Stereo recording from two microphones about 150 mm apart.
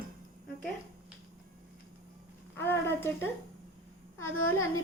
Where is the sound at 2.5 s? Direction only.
15° left (ahead or behind).